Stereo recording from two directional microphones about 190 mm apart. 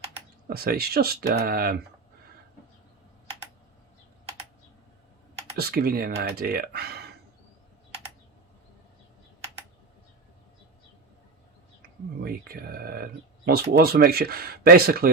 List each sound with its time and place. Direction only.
0.4 s speech: 55° right (ahead or behind)
5.5 s speech: 55° right (ahead or behind)
12.2 s speech: 50° right (ahead or behind)